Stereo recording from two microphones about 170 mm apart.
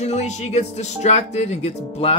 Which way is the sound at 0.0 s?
40° left (ahead or behind).